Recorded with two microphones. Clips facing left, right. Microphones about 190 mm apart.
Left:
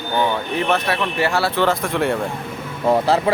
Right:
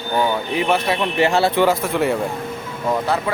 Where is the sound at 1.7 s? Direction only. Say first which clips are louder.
Right 1 dB; 5° right (ahead or behind).